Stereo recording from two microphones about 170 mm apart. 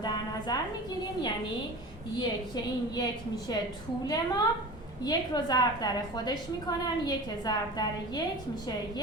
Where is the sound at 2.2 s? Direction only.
25° left (ahead or behind).